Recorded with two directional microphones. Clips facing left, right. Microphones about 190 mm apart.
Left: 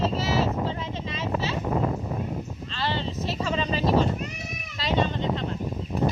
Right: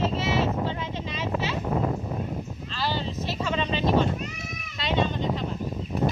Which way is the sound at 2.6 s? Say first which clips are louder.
Even; 5° right (ahead or behind).